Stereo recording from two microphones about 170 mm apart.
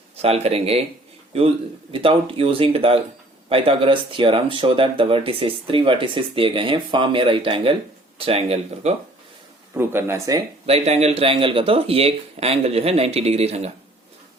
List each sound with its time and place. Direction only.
0.2 s speech: 35° right (ahead or behind)
9.7 s speech: 15° right (ahead or behind)
10.7 s speech: 40° right (ahead or behind)